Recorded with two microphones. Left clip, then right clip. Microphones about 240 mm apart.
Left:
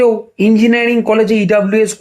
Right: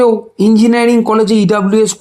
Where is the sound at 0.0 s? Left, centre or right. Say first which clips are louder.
Right 1 dB; right.